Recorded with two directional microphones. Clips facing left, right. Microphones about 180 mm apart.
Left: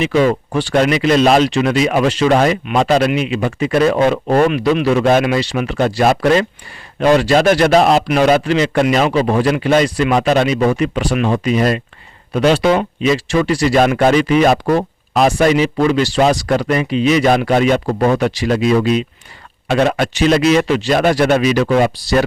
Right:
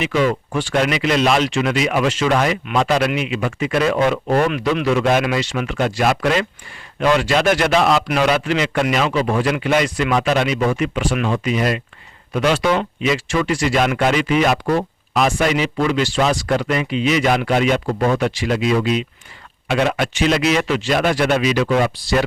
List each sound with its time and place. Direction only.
0.0 s speech: 35° left (ahead or behind)
4.6 s speech: 35° left (ahead or behind)